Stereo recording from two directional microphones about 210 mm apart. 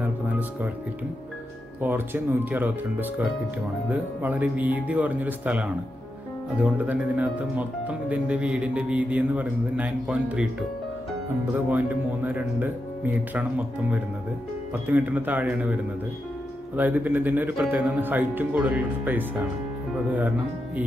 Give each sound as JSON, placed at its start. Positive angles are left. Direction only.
{"t": 0.0, "sound": "music", "side_deg": -10}
{"t": 1.8, "sound": "speech", "side_deg": -10}
{"t": 11.5, "sound": "speech", "side_deg": -10}